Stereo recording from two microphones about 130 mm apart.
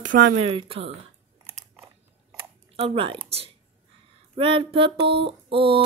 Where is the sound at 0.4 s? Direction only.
45° right (ahead or behind).